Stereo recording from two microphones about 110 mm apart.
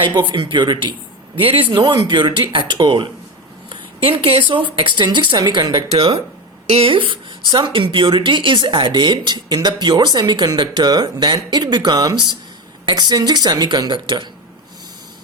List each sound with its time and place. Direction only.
0.0 s a woman's voice: 45° right (ahead or behind)
1.4 s speech: 55° right (ahead or behind)
1.7 s speech: 35° right (ahead or behind)
2.1 s a woman's voice: 50° right (ahead or behind)
4.4 s a woman's voice: 50° right (ahead or behind)
6.7 s a woman's voice: 60° right (ahead or behind)